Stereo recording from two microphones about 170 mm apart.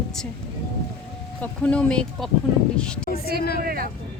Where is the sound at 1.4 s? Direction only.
5° left (ahead or behind).